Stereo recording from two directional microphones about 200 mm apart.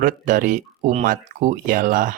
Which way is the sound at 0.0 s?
40° right (ahead or behind).